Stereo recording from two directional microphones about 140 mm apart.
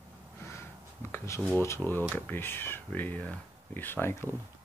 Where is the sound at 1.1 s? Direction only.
20° left (ahead or behind).